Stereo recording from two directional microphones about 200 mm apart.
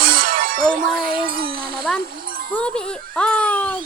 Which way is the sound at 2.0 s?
45° right (ahead or behind).